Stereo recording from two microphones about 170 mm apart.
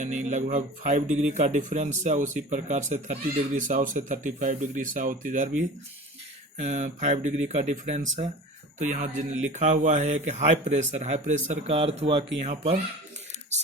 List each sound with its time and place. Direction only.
0.0 s speech: 45° right (ahead or behind)